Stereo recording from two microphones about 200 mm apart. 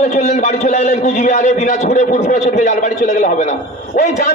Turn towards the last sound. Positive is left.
turn(degrees=40)  # may be behind; listen again after turning